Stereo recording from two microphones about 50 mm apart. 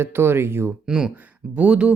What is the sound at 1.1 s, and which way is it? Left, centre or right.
Speech, right.